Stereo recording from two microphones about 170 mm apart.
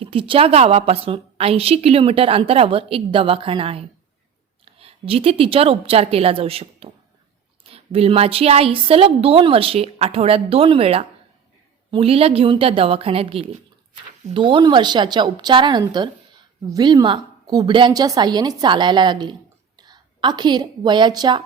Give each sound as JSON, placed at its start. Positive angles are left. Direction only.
{"t": 0.0, "sound": "a woman's voice", "side_deg": -30}